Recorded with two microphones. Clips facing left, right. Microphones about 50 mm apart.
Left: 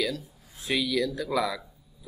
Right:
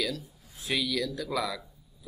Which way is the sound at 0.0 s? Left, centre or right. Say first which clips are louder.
Left 3 dB; centre.